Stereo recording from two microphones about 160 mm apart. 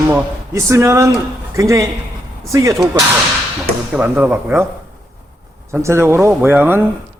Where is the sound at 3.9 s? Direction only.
10° right (ahead or behind).